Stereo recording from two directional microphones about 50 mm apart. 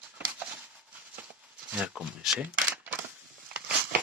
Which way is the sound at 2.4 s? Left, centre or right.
Right.